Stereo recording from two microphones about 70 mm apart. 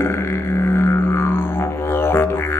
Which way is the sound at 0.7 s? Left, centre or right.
Left.